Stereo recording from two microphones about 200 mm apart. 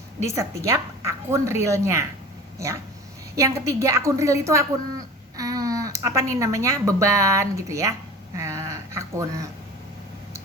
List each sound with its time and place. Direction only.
0.3 s speech: 15° right (ahead or behind)
3.3 s speech: 15° right (ahead or behind)
8.4 s a sound: 15° right (ahead or behind)